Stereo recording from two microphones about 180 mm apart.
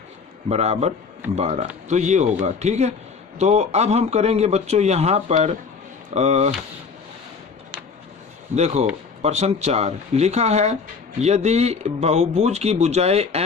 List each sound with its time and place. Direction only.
0.4 s a man's voice: 35° right (ahead or behind)
8.5 s a man's voice: 40° right (ahead or behind)